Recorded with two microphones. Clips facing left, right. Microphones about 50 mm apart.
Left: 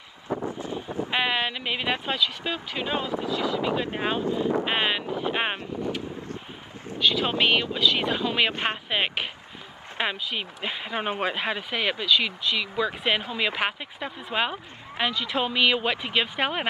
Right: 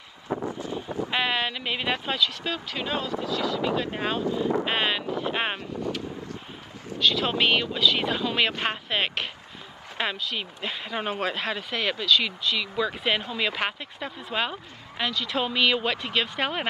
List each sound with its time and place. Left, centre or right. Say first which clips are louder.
0.3 s wind noise: even; right
1.1 s speech: left 1 dB; centre; by 4.6 s left
4.6 s speech: even; centre
5.6 s speech: left 1 dB; left
7.0 s speech: even; centre